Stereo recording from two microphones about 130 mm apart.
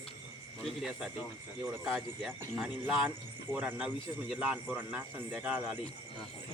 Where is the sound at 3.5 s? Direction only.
10° right (ahead or behind).